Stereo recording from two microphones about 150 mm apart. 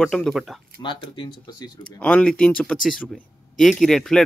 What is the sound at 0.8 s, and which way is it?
Speech, 30° left (ahead or behind).